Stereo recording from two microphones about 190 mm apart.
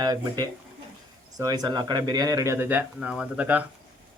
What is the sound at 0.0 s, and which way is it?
Speech, 20° right (ahead or behind).